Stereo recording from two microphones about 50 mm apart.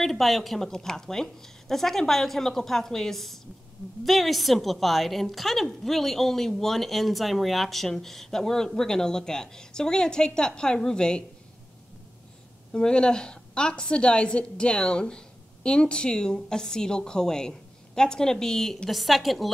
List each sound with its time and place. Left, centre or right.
0.0 s a woman's voice: centre
12.7 s a woman's voice: centre